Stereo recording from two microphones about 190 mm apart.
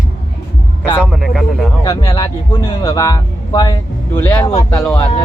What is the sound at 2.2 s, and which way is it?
Speech, 15° left (ahead or behind).